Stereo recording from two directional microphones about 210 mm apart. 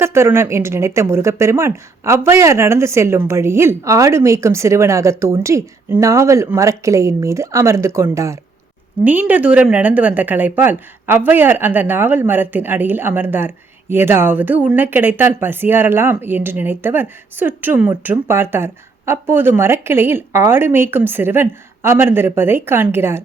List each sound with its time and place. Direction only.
0.0 s a woman's voice: 10° right (ahead or behind)